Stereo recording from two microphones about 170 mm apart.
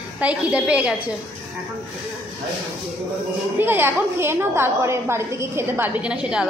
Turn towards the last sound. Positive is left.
turn(degrees=-5)  # may be behind; listen again after turning